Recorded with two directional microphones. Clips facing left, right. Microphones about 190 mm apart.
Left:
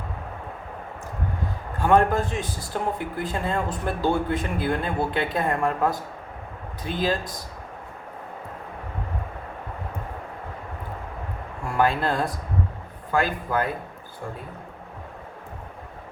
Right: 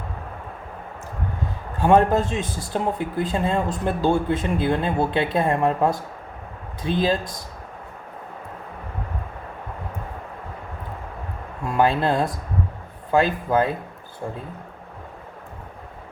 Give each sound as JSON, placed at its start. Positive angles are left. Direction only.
{"t": 1.9, "sound": "speech", "side_deg": -20}
{"t": 11.7, "sound": "speech", "side_deg": -20}